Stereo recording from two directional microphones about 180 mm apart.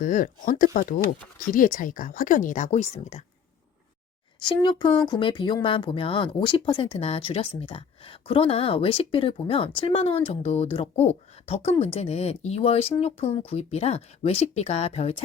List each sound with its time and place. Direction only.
0.0 s speech: 50° left (ahead or behind)
4.4 s speech: 25° left (ahead or behind)